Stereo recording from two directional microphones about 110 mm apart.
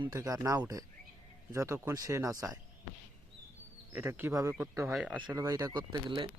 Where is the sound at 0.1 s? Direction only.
30° right (ahead or behind).